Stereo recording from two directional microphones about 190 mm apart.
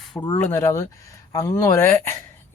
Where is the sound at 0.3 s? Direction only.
15° left (ahead or behind).